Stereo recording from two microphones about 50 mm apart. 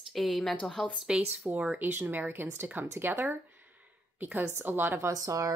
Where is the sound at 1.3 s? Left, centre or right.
Right.